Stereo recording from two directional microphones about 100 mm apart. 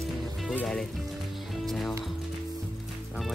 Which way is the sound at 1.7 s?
Centre (ahead or behind).